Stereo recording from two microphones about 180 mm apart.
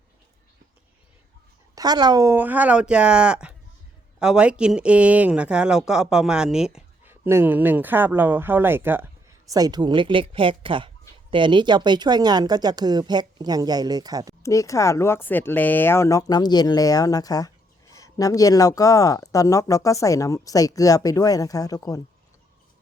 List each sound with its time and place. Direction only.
1.7 s speech: 20° right (ahead or behind)
14.4 s speech: 15° left (ahead or behind)